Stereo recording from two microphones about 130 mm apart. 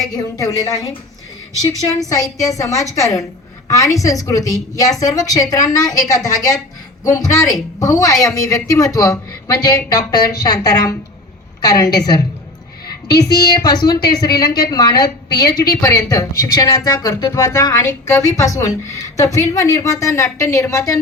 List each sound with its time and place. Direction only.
0.1 s a woman's voice: 30° left (ahead or behind)
2.0 s a woman's voice: 25° left (ahead or behind)